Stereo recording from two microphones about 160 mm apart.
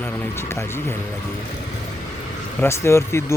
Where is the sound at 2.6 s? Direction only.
15° left (ahead or behind).